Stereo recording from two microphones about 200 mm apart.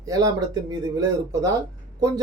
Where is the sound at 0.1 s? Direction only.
15° right (ahead or behind).